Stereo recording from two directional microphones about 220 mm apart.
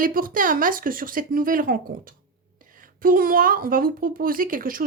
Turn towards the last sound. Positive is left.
turn(degrees=-40)  # may be behind; listen again after turning